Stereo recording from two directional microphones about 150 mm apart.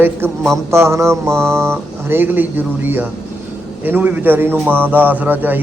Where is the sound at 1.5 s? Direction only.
15° right (ahead or behind).